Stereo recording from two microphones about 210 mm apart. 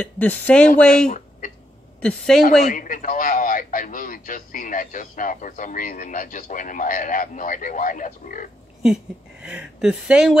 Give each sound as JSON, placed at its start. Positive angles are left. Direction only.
{"t": 0.0, "sound": "speech", "side_deg": 5}
{"t": 1.0, "sound": "a sound", "side_deg": 40}
{"t": 2.0, "sound": "speech", "side_deg": 5}
{"t": 2.6, "sound": "a man's voice", "side_deg": 40}
{"t": 8.8, "sound": "speech", "side_deg": -5}